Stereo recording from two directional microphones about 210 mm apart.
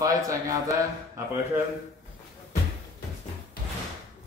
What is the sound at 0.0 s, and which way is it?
A man's voice, 15° right (ahead or behind).